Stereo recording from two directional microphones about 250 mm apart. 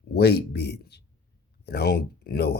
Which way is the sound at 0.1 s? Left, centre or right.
Left.